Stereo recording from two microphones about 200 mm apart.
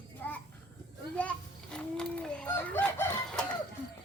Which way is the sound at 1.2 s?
5° left (ahead or behind).